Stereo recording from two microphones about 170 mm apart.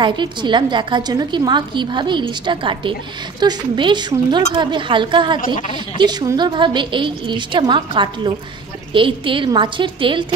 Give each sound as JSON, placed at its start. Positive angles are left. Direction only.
{"t": 0.0, "sound": "a woman's voice", "side_deg": -25}